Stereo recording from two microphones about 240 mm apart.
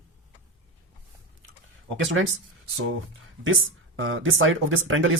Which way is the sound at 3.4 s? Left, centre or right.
Right.